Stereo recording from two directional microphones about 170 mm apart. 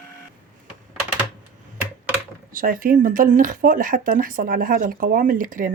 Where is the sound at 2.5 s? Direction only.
55° right (ahead or behind).